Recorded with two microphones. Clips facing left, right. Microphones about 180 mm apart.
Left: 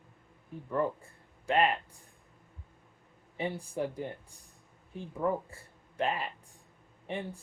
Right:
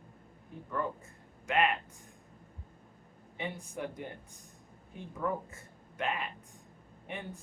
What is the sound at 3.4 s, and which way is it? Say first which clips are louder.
A man's voice: left 5 dB; 30° left (ahead or behind).